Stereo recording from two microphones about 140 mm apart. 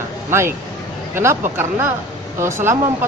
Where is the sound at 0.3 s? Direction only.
15° right (ahead or behind).